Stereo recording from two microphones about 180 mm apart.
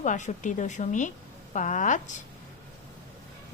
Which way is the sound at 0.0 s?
45° left (ahead or behind).